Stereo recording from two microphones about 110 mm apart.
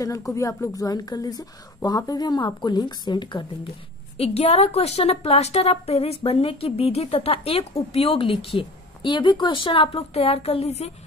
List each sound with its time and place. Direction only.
0.0 s a woman's voice: 30° left (ahead or behind)
4.2 s a woman's voice: 65° left (ahead or behind)